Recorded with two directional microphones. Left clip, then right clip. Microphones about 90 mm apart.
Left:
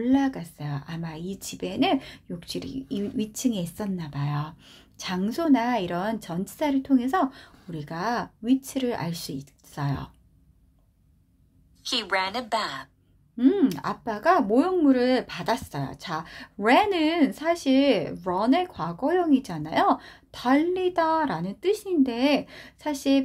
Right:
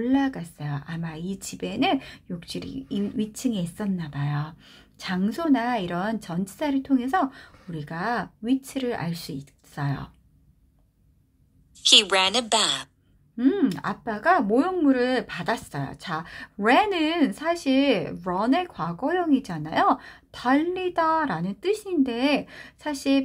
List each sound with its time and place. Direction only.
0.0 s a woman's voice: 20° left (ahead or behind)
13.4 s a woman's voice: 20° left (ahead or behind)